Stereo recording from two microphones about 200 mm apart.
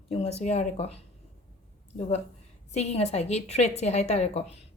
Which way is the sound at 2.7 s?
35° left (ahead or behind).